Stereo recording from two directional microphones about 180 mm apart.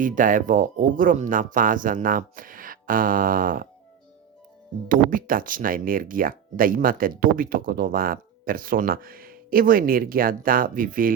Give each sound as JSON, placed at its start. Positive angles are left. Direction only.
{"t": 0.0, "sound": "speech", "side_deg": -50}
{"t": 4.9, "sound": "speech", "side_deg": -50}